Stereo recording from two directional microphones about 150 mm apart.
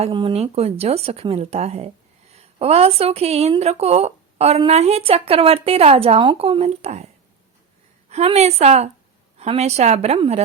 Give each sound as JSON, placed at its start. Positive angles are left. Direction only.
{"t": 0.0, "sound": "a woman's voice", "side_deg": -35}
{"t": 8.1, "sound": "a woman's voice", "side_deg": -45}